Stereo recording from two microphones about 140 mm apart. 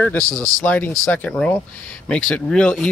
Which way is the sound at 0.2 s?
25° right (ahead or behind).